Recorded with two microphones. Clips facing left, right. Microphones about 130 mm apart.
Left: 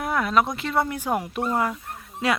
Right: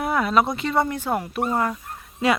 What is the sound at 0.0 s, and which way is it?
Speech, centre (ahead or behind).